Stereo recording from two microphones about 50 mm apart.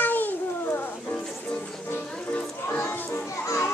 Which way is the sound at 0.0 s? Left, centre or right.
Left.